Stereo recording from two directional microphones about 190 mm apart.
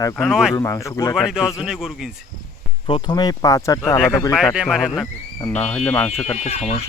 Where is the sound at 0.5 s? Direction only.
15° left (ahead or behind).